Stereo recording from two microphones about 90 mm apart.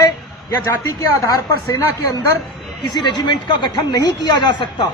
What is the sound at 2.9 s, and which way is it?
Speech, 50° left (ahead or behind).